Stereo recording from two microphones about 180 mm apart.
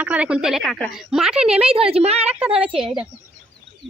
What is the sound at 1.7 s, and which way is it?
A woman's voice, 30° right (ahead or behind).